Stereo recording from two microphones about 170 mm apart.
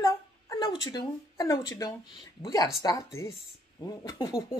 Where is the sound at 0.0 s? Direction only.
25° left (ahead or behind).